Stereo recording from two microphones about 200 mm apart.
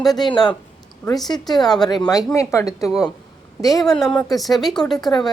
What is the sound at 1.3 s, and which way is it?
Speech, 20° left (ahead or behind).